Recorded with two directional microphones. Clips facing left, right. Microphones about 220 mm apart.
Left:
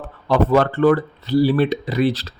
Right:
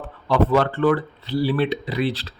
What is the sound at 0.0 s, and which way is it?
Speech, 45° left (ahead or behind).